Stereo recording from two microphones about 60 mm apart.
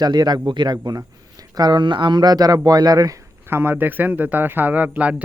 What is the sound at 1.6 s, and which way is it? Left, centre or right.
A man's voice, right.